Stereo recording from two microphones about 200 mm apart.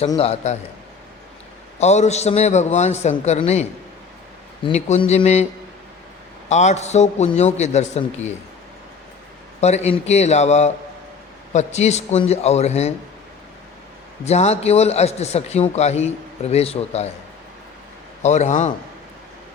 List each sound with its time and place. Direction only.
0.2 s a man's voice: 30° left (ahead or behind)
1.8 s a man's voice: 35° left (ahead or behind)
6.5 s a man's voice: 35° left (ahead or behind)
9.6 s a man's voice: 35° left (ahead or behind)
14.3 s a man's voice: 35° left (ahead or behind)
18.2 s a man's voice: 35° left (ahead or behind)